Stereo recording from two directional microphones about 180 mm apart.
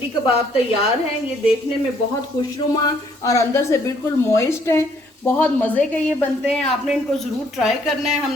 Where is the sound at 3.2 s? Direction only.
15° left (ahead or behind).